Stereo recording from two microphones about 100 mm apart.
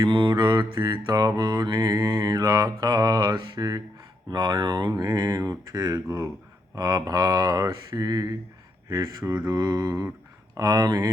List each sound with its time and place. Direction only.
0.1 s mantra: 55° right (ahead or behind)